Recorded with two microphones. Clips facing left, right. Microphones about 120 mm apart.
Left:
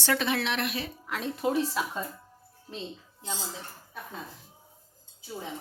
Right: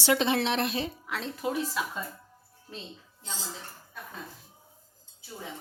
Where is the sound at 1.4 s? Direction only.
25° left (ahead or behind).